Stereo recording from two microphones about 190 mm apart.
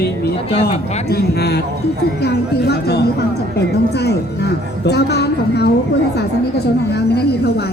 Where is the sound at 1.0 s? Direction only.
55° left (ahead or behind).